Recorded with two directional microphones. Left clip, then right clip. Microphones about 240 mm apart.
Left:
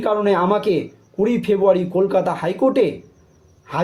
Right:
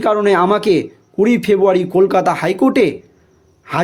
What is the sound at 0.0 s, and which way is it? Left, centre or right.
Speech, right.